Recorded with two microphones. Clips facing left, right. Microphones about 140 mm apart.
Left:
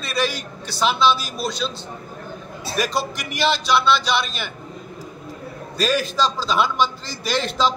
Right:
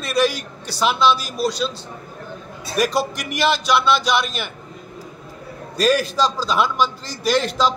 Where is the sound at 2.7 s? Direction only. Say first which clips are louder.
Right 4 dB; 45° right (ahead or behind).